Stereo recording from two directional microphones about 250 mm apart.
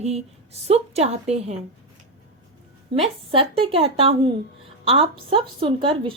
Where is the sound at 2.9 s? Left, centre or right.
Right.